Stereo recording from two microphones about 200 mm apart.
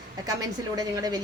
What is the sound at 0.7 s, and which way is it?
Speech, 20° right (ahead or behind).